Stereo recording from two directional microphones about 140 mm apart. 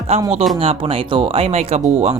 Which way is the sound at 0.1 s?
45° right (ahead or behind).